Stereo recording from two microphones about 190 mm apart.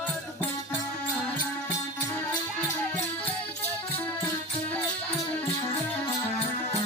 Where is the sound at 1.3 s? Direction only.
10° left (ahead or behind).